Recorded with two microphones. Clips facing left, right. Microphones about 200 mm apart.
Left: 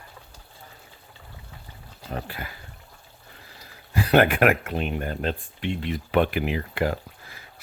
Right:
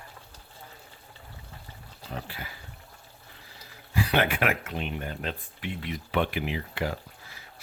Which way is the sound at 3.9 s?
45° left (ahead or behind).